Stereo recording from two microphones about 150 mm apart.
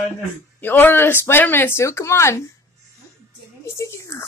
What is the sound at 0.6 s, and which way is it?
Speech, 10° left (ahead or behind).